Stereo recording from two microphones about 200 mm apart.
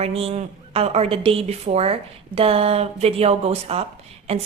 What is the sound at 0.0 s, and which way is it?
A woman's voice, 30° right (ahead or behind).